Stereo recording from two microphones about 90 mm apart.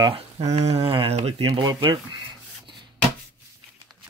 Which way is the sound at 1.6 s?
60° right (ahead or behind).